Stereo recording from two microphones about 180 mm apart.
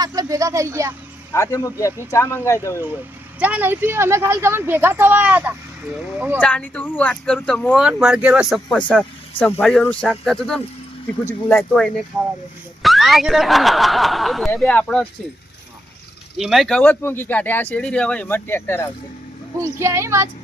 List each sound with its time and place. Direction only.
0.0 s speech: 20° right (ahead or behind)
1.3 s speech: 15° left (ahead or behind)
3.4 s speech: 10° right (ahead or behind)
6.4 s speech: 10° left (ahead or behind)
16.4 s speech: centre (ahead or behind)
19.6 s speech: 15° right (ahead or behind)